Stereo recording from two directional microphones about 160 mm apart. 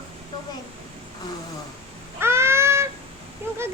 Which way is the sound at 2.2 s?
15° right (ahead or behind).